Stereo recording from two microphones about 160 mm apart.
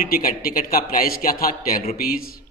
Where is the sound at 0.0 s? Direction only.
65° left (ahead or behind).